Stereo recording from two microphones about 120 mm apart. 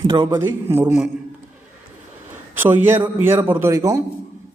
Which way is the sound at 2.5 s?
15° right (ahead or behind).